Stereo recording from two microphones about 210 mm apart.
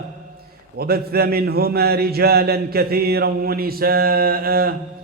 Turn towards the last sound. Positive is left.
turn(degrees=-45)  # may be behind; listen again after turning